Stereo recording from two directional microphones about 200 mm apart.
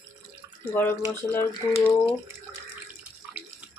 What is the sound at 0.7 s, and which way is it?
Speech, 10° left (ahead or behind).